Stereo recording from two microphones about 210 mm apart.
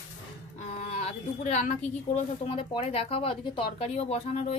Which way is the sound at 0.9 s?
35° left (ahead or behind).